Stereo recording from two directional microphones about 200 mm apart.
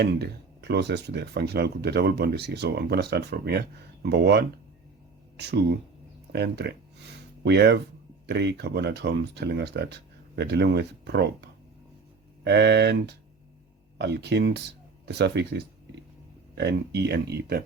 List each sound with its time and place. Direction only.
0.0 s speech: 55° right (ahead or behind)
12.5 s speech: 55° right (ahead or behind)